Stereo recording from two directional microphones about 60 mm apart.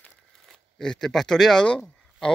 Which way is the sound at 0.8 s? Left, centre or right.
Centre.